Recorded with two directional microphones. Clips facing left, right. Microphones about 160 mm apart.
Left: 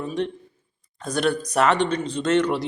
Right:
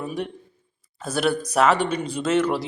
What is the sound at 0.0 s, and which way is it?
A man's voice, 10° right (ahead or behind).